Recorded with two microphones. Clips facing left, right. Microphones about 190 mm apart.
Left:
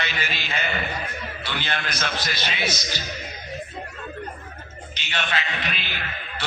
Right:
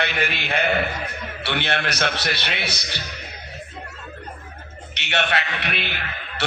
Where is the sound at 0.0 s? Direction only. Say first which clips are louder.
Right 5 dB; 60° right (ahead or behind).